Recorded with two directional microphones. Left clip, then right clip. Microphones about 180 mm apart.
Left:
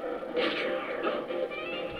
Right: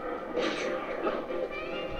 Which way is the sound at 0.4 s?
50° left (ahead or behind).